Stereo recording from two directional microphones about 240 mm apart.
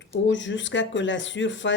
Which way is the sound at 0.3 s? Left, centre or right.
Left.